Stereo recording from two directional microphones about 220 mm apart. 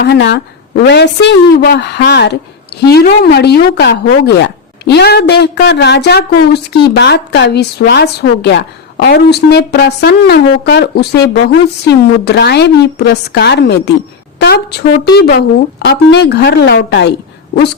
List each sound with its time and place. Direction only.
0.0 s a woman's voice: 50° left (ahead or behind)